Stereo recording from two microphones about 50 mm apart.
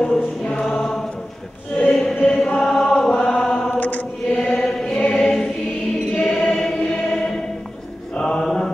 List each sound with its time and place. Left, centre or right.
0.0 s choir: centre
1.9 s music: centre
2.2 s chant: centre
3.7 s chant: left
4.4 s chant: centre
5.1 s choir: centre
8.2 s mantra: centre